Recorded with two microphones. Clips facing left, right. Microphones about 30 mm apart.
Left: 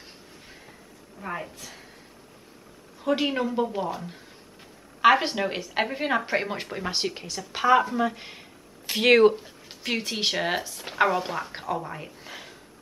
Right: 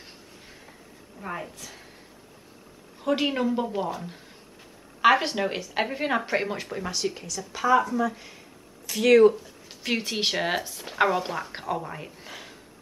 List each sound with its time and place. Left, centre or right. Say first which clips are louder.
1.2 s a woman's voice: left 1 dB; centre
3.0 s a woman's voice: even; centre
6.5 s speech: even; centre
7.2 s speech: left 2 dB; left
9.8 s speech: even; centre